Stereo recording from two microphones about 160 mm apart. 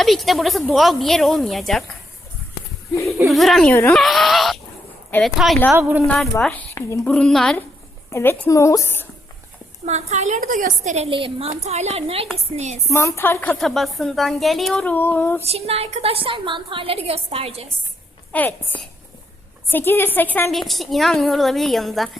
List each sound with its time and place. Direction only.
0.0 s speech: centre (ahead or behind)
3.2 s speech: centre (ahead or behind)
3.7 s a woman's voice: 15° left (ahead or behind)
3.9 s speech: centre (ahead or behind)
8.1 s a woman's voice: 15° left (ahead or behind)
9.8 s a woman's voice: 45° right (ahead or behind)
12.9 s a woman's voice: 15° left (ahead or behind)
13.6 s speech: centre (ahead or behind)
15.4 s a woman's voice: 40° right (ahead or behind)
18.3 s a woman's voice: 10° left (ahead or behind)
19.6 s a woman's voice: 15° left (ahead or behind)
20.5 s speech: centre (ahead or behind)